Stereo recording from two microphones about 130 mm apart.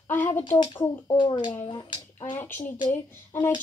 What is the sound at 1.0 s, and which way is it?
Speech, 40° left (ahead or behind).